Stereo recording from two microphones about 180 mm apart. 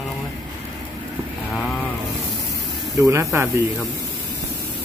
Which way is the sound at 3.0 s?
15° right (ahead or behind).